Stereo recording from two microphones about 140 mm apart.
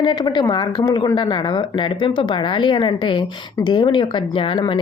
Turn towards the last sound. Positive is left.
turn(degrees=35)  # may be behind; listen again after turning